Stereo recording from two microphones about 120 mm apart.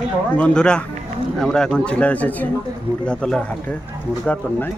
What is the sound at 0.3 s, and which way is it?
Speech, 10° left (ahead or behind).